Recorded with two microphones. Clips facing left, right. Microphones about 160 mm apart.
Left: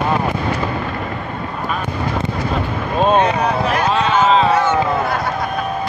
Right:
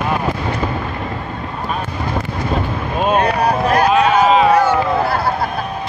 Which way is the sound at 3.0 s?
25° left (ahead or behind).